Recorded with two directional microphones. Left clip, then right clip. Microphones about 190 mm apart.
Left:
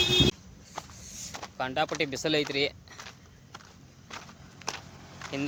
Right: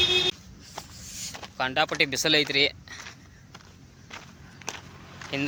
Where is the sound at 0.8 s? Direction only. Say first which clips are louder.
Right 2 dB; 5° left (ahead or behind).